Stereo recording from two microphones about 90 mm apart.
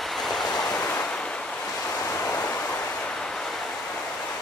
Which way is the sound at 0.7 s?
25° left (ahead or behind).